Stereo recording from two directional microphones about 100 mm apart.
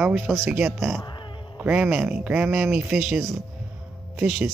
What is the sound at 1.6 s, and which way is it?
Speech, 5° right (ahead or behind).